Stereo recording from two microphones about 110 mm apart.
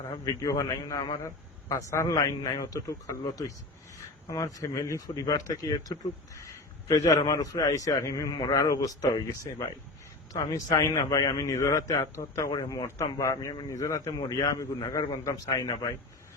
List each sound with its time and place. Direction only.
0.1 s speech: 35° left (ahead or behind)